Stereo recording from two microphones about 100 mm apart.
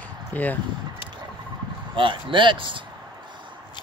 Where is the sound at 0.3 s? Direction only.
15° left (ahead or behind).